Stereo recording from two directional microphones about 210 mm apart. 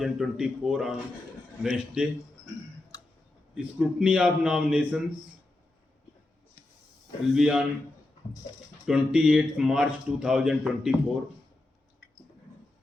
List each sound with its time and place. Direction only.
0.0 s a man's voice: centre (ahead or behind)
2.9 s a sound: 15° left (ahead or behind)
3.5 s a man's voice: 5° right (ahead or behind)
7.3 s a man's voice: 5° right (ahead or behind)
8.9 s a man's voice: 5° right (ahead or behind)